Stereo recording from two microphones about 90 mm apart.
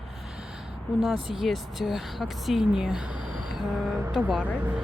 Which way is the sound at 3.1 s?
60° left (ahead or behind).